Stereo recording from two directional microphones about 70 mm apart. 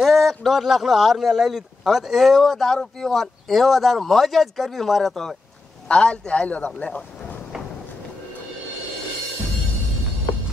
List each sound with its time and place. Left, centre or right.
0.0 s speech: centre
5.9 s a man's voice: centre